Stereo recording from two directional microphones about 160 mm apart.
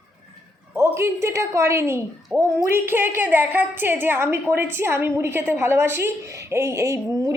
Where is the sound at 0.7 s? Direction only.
15° right (ahead or behind).